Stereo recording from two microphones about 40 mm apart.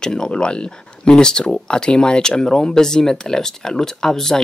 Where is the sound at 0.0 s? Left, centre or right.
Centre.